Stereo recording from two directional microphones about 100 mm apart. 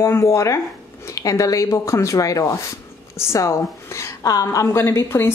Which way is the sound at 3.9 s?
35° left (ahead or behind).